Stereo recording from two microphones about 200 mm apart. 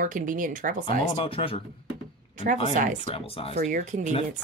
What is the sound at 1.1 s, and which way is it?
Speech, 25° left (ahead or behind).